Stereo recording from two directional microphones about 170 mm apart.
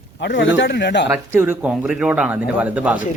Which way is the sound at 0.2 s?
90° left.